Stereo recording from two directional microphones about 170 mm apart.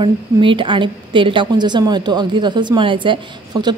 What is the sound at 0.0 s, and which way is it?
A woman's voice, 30° right (ahead or behind).